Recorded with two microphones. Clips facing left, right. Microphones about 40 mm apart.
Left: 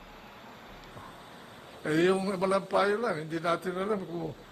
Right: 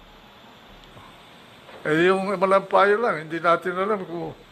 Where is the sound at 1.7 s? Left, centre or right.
Right.